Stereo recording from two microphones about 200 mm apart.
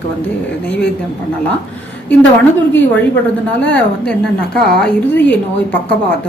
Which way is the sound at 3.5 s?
5° left (ahead or behind).